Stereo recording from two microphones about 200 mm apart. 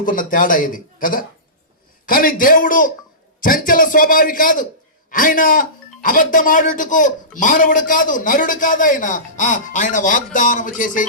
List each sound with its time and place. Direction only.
0.0 s a man's voice: 40° left (ahead or behind)